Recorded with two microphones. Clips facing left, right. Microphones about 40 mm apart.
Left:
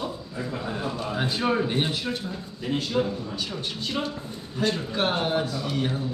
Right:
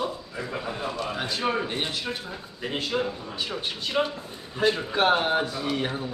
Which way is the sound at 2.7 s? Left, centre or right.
Right.